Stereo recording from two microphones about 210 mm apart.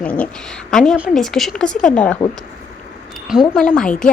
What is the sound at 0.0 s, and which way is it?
A woman's voice, 5° left (ahead or behind).